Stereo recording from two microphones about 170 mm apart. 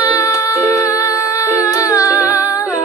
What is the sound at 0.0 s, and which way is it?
Music, 20° left (ahead or behind).